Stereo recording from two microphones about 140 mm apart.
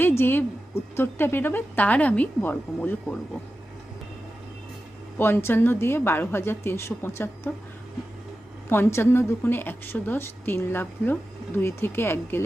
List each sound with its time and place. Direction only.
0.0 s a woman's voice: 15° left (ahead or behind)
5.1 s a woman's voice: 15° left (ahead or behind)
8.7 s a woman's voice: 15° left (ahead or behind)